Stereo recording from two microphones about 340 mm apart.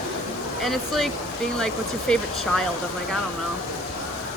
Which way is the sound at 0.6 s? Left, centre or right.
Centre.